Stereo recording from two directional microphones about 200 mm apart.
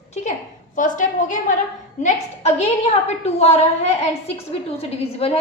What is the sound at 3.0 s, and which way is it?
A woman's voice, 35° left (ahead or behind).